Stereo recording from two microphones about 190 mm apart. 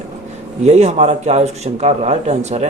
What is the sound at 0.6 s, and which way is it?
A man's voice, 35° right (ahead or behind).